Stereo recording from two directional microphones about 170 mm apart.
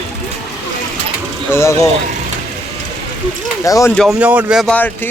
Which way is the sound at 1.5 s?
15° left (ahead or behind).